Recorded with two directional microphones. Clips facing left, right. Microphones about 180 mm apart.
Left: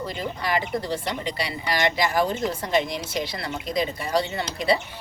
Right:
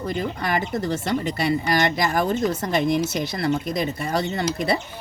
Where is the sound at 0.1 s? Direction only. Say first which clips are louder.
Right 3 dB; 50° right (ahead or behind).